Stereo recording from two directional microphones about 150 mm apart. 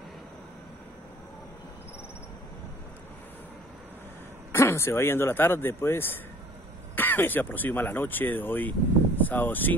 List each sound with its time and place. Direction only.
4.5 s speech: 15° left (ahead or behind)